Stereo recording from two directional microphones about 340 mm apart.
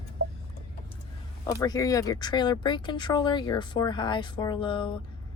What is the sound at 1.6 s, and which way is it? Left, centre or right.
Speech, centre.